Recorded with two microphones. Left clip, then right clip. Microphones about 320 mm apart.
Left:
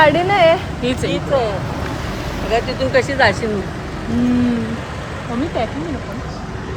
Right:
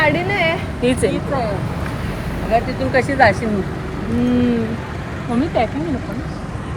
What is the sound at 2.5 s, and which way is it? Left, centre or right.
Speech, centre.